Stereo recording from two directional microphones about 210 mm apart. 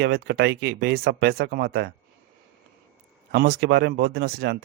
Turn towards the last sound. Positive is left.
turn(degrees=-50)  # may be behind; listen again after turning